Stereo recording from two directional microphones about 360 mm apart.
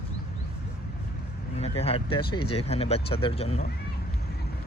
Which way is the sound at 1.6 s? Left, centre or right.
Centre.